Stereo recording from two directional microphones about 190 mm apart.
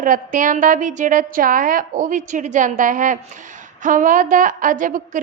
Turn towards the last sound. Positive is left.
turn(degrees=-45)  # may be behind; listen again after turning